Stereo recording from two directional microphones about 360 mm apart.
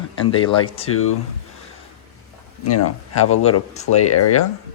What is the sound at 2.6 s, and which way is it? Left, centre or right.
Speech, left.